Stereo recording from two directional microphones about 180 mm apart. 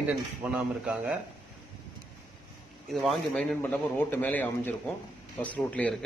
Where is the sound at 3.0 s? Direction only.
Centre (ahead or behind).